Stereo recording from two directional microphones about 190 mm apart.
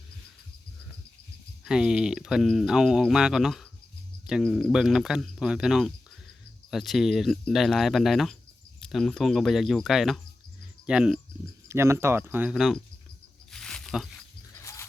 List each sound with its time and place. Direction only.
1.6 s speech: 5° right (ahead or behind)
13.5 s a sound: 5° left (ahead or behind)
14.6 s cricket: 15° left (ahead or behind)